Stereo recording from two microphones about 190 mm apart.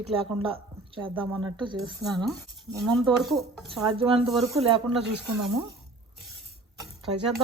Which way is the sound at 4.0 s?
30° right (ahead or behind).